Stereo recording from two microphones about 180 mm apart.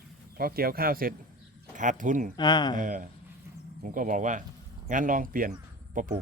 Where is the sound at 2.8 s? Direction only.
50° right (ahead or behind).